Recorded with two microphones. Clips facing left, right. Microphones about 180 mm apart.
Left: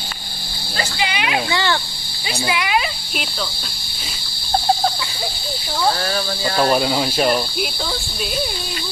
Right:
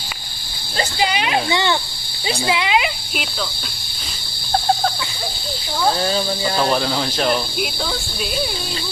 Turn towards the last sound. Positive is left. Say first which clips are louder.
# left 1 dB
turn(degrees=5)  # may be behind; listen again after turning